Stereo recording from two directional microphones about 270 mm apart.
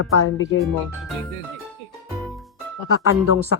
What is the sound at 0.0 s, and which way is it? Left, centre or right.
Speech, left.